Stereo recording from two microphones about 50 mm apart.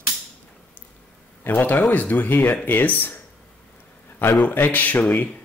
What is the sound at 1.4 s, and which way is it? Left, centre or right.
Speech, left.